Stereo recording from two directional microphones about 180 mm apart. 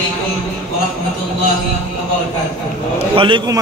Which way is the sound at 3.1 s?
30° right (ahead or behind).